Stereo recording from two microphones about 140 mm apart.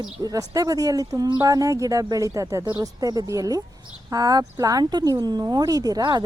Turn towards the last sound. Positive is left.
turn(degrees=-25)  # may be behind; listen again after turning